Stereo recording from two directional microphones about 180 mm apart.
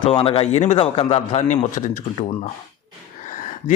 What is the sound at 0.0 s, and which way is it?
A man's voice, 30° left (ahead or behind).